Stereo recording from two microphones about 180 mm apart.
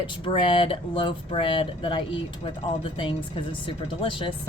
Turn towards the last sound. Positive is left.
turn(degrees=30)  # may be behind; listen again after turning